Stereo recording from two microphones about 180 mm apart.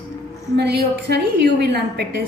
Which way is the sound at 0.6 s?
65° right (ahead or behind).